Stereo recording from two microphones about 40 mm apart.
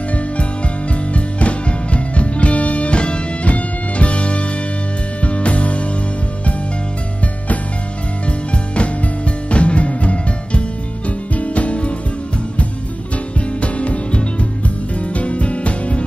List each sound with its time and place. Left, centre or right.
1.1 s music: left
8.3 s music: left
13.6 s music: left